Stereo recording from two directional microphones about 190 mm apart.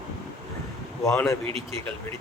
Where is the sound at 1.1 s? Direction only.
15° left (ahead or behind).